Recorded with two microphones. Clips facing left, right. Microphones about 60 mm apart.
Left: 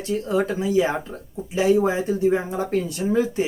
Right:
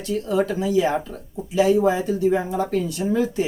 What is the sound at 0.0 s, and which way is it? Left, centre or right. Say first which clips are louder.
Speech: right 1 dB; left.